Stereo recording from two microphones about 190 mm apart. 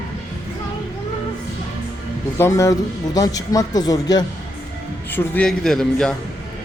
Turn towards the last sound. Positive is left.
turn(degrees=5)  # may be behind; listen again after turning